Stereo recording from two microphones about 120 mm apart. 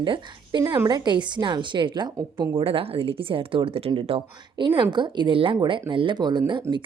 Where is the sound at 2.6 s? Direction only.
50° right (ahead or behind).